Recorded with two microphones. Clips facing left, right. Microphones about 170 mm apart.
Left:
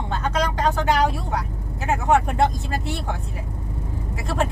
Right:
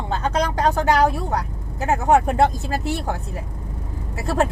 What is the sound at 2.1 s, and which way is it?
Speech, 35° right (ahead or behind).